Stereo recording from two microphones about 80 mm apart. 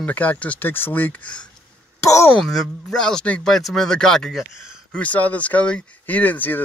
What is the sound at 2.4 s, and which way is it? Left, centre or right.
Speech, centre.